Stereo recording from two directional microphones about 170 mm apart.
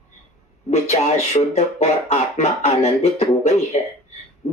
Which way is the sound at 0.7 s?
40° left (ahead or behind).